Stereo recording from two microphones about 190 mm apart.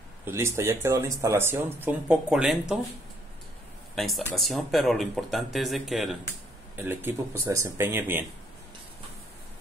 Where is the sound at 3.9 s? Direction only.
Centre (ahead or behind).